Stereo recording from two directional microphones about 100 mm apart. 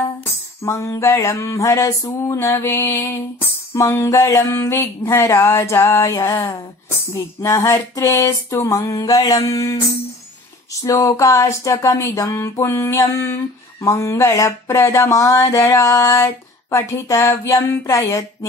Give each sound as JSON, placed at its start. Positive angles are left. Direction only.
{"t": 0.7, "sound": "mantra", "side_deg": 30}
{"t": 7.4, "sound": "speech", "side_deg": 30}
{"t": 16.7, "sound": "mantra", "side_deg": 30}